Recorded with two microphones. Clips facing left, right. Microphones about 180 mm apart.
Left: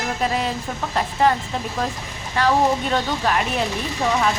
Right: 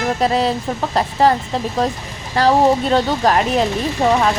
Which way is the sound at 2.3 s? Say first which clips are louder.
Right 5 dB; 35° right (ahead or behind).